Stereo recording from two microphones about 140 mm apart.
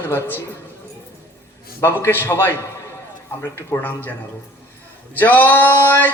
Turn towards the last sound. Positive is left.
turn(degrees=15)  # may be behind; listen again after turning